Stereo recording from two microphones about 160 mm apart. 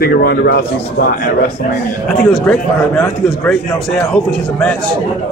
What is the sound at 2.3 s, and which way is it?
Speech, 5° left (ahead or behind).